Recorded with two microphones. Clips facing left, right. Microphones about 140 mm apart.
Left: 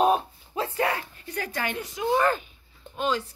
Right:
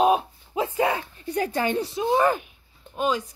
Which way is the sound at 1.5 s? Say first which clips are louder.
Right 7 dB; 30° right (ahead or behind).